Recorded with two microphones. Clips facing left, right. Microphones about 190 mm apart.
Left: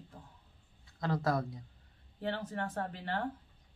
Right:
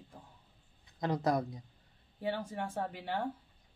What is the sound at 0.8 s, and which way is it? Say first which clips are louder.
A woman's voice: right 1 dB; 20° right (ahead or behind).